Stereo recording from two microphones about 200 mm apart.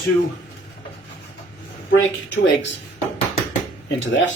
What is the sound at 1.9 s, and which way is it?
Speech, 65° left (ahead or behind).